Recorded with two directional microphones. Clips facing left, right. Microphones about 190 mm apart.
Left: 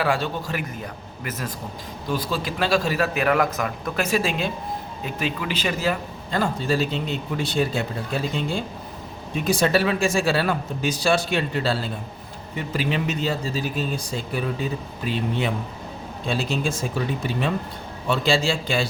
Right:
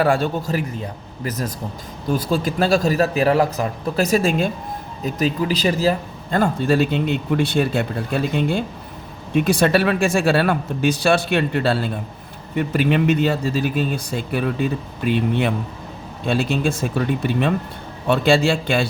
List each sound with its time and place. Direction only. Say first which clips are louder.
0.0 s a man's voice: right 5 dB; 45° right (ahead or behind)
6.3 s a man's voice: right 5 dB; 55° right (ahead or behind)
18.1 s a man's voice: right 5 dB; 60° right (ahead or behind)